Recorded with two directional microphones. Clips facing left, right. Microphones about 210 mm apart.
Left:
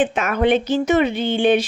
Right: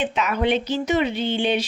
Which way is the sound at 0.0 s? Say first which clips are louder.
Left 4 dB; 50° left (ahead or behind).